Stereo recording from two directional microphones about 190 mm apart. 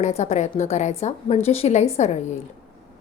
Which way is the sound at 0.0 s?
35° left (ahead or behind).